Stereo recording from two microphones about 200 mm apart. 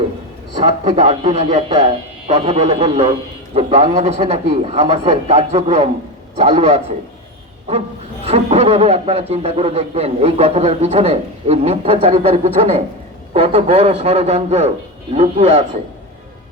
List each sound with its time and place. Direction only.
0.6 s a man's voice: 35° right (ahead or behind)
8.2 s a man's voice: 30° right (ahead or behind)